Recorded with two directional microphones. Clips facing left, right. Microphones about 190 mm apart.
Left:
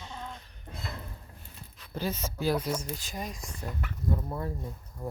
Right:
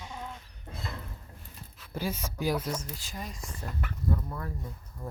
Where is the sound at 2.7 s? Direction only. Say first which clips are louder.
Left 3 dB; 15° left (ahead or behind).